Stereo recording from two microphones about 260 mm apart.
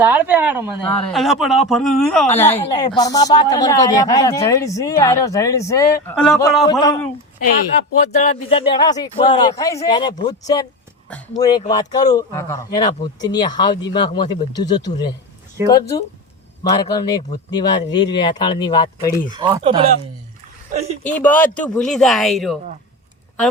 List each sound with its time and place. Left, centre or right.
0.0 s speech: centre
6.1 s speech: centre
6.7 s speech: centre
8.1 s speech: left
19.3 s speech: centre
21.0 s speech: centre